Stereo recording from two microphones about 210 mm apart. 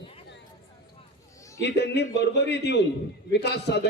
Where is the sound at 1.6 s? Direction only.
55° left (ahead or behind).